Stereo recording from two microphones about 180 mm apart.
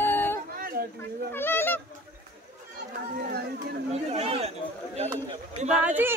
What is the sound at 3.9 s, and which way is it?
Speech, 35° right (ahead or behind).